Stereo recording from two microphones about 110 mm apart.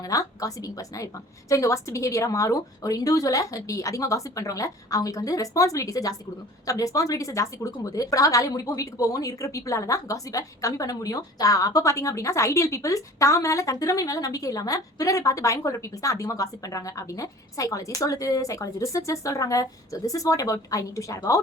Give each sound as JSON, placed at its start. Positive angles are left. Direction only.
{"t": 0.0, "sound": "a woman's voice", "side_deg": 30}